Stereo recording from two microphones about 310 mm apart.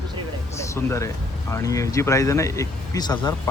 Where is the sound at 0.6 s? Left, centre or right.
Centre.